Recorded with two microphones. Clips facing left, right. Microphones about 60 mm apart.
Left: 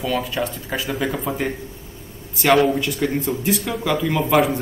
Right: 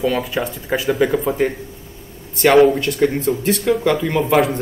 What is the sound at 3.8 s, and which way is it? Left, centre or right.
Speech, centre.